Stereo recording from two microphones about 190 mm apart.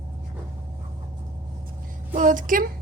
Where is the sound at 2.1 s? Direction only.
40° right (ahead or behind).